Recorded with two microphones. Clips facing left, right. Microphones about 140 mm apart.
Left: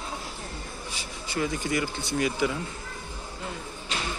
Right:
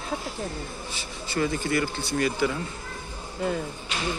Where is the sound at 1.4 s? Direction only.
10° left (ahead or behind).